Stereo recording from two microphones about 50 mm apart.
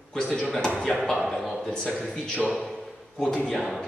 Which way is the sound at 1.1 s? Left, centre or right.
Centre.